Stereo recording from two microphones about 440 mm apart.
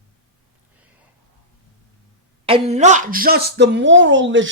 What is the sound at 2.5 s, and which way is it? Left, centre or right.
Speech, centre.